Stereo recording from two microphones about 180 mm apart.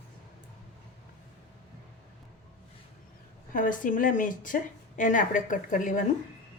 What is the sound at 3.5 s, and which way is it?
A woman's voice, 50° left (ahead or behind).